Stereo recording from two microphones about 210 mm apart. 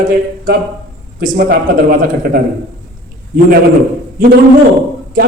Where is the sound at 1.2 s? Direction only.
40° right (ahead or behind).